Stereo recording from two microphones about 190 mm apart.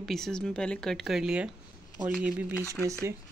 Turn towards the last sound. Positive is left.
turn(degrees=-15)  # may be behind; listen again after turning